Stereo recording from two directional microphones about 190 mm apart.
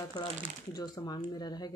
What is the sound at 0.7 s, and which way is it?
Speech, 20° left (ahead or behind).